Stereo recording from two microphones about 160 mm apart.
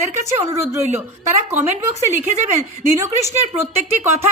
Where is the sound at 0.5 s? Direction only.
20° right (ahead or behind).